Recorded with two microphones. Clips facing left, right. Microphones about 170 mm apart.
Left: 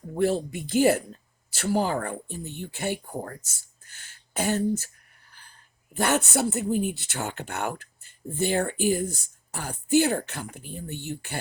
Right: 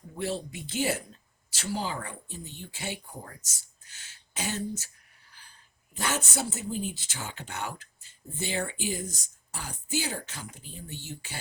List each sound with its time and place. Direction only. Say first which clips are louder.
0.1 s speech: left 9 dB; 50° left (ahead or behind)
5.9 s speech: left 8 dB; 60° left (ahead or behind)